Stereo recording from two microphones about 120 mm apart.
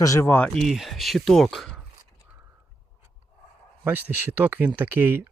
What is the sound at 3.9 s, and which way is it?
Speech, 15° right (ahead or behind).